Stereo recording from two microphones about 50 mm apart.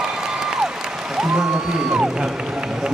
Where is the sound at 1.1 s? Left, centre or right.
Centre.